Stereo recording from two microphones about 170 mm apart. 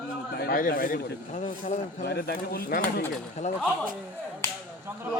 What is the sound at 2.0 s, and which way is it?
Speech, 65° left (ahead or behind).